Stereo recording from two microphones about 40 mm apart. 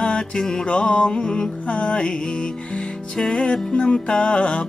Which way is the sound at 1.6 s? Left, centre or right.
Left.